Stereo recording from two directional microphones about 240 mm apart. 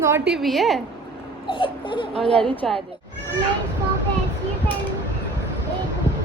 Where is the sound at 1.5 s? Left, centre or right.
Left.